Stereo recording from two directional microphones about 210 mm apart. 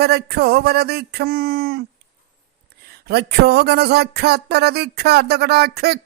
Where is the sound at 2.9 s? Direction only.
50° right (ahead or behind).